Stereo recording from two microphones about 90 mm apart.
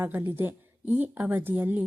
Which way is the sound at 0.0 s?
25° right (ahead or behind).